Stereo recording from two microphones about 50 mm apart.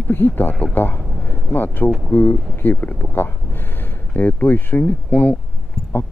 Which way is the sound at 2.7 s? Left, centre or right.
Left.